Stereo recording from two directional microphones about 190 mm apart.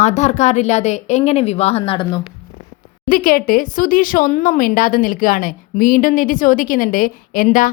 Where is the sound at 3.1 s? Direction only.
45° left (ahead or behind).